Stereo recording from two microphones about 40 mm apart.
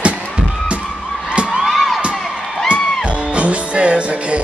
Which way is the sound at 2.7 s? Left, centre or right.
Right.